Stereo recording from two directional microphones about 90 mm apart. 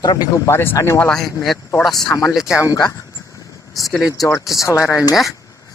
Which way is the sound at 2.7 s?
40° left (ahead or behind).